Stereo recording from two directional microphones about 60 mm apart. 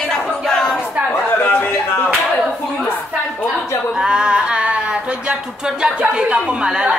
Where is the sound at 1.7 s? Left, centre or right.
Left.